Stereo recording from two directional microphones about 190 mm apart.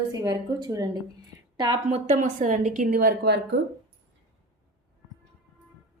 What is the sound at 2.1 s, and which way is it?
A woman's voice, 40° right (ahead or behind).